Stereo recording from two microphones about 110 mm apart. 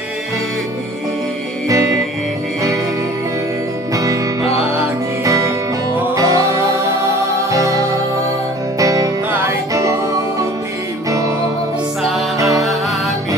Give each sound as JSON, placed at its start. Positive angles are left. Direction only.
{"t": 3.9, "sound": "music", "side_deg": -30}
{"t": 11.1, "sound": "music", "side_deg": -30}
{"t": 12.4, "sound": "music", "side_deg": -30}